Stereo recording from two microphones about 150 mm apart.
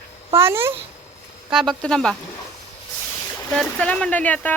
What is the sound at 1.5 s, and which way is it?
Speech, centre (ahead or behind).